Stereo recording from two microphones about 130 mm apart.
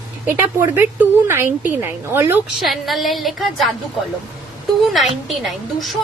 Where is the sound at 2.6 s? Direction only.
Centre (ahead or behind).